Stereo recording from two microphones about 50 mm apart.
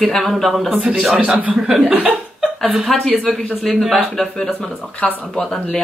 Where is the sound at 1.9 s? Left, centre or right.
Right.